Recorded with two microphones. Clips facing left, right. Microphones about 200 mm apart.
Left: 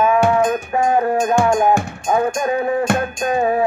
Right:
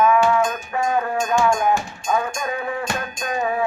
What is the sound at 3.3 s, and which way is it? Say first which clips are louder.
Music: left 5 dB; 35° left (ahead or behind).